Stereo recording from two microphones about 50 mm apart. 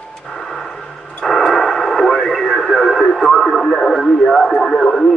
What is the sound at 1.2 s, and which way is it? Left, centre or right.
Radio, centre.